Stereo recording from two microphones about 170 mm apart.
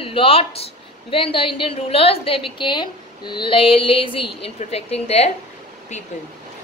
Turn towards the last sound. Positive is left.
turn(degrees=35)  # may be behind; listen again after turning